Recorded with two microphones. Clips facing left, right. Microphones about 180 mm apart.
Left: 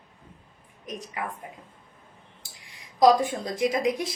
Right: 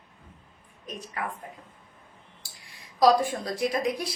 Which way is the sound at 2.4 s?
20° left (ahead or behind).